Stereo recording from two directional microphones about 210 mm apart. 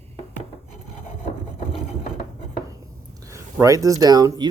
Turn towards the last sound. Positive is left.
turn(degrees=-20)  # may be behind; listen again after turning